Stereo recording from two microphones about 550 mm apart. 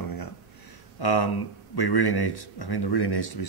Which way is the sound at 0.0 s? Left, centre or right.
Left.